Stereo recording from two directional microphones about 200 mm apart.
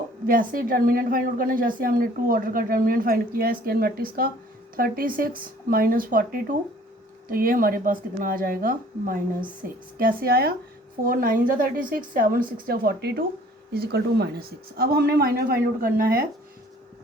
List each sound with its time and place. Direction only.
0.3 s a woman's voice: 45° right (ahead or behind)